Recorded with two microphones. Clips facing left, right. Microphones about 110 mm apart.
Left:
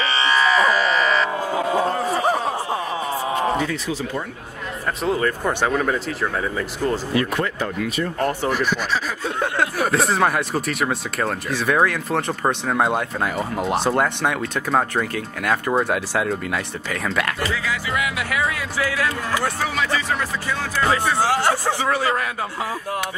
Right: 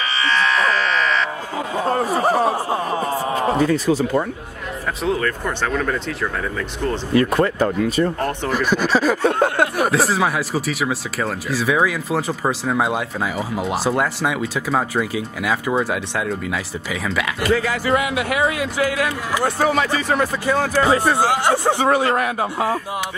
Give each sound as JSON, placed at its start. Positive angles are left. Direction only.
{"t": 0.3, "sound": "electric shaver", "side_deg": 5}
{"t": 3.5, "sound": "speech", "side_deg": -40}
{"t": 5.2, "sound": "speech", "side_deg": 15}
{"t": 7.2, "sound": "speech", "side_deg": -40}
{"t": 9.2, "sound": "speech", "side_deg": -55}
{"t": 9.8, "sound": "speech", "side_deg": 0}
{"t": 17.4, "sound": "speech", "side_deg": -50}
{"t": 18.0, "sound": "a man's voice", "side_deg": -30}
{"t": 19.6, "sound": "speech", "side_deg": -45}
{"t": 21.2, "sound": "a man's voice", "side_deg": -20}